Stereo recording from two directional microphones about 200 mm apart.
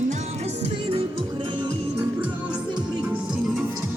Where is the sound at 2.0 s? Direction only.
5° right (ahead or behind).